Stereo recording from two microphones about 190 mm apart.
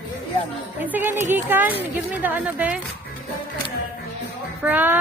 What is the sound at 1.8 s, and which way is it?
Speech, 10° right (ahead or behind).